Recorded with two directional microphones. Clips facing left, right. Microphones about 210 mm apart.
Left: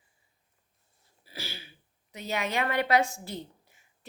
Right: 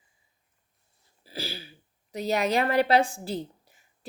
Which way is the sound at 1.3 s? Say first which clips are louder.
Right 6 dB; 35° right (ahead or behind).